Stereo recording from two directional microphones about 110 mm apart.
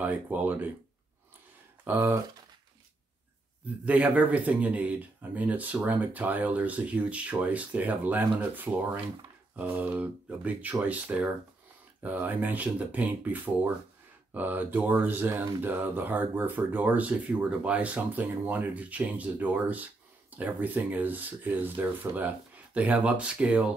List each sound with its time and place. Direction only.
0.0 s speech: 15° right (ahead or behind)
1.9 s speech: 20° right (ahead or behind)
3.8 s speech: 15° right (ahead or behind)